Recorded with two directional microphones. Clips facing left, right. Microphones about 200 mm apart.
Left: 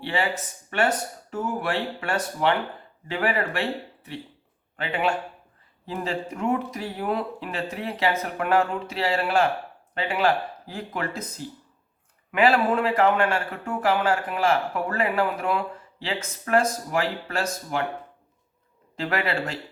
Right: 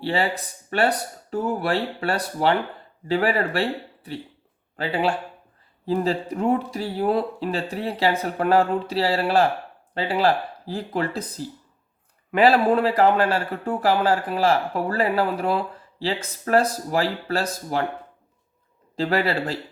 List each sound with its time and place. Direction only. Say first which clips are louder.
0.0 s a man's voice: right 3 dB; 35° right (ahead or behind)
18.9 s a man's voice: right 4 dB; 30° right (ahead or behind)